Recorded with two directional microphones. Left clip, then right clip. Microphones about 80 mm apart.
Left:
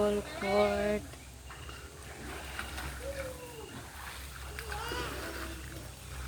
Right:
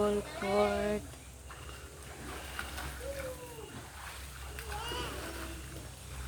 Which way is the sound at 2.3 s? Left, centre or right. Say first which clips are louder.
Left 1 dB; left.